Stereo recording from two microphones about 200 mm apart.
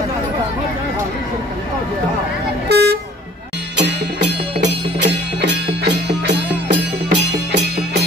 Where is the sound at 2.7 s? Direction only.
55° right (ahead or behind).